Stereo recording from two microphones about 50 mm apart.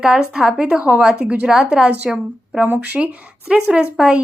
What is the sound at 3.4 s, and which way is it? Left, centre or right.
Speech, centre.